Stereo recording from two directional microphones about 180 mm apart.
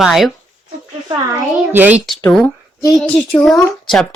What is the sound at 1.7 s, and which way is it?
Speech, 10° right (ahead or behind).